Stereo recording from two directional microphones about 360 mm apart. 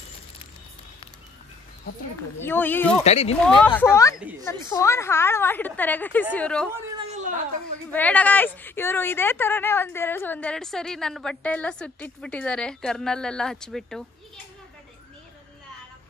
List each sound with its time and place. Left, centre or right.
2.4 s speech: centre
3.0 s speech: centre
3.4 s speech: centre
7.0 s a sound: centre
7.9 s speech: centre